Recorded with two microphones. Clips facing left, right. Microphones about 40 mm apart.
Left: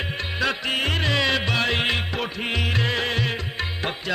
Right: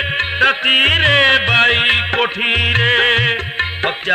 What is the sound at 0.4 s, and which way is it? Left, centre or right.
Music, right.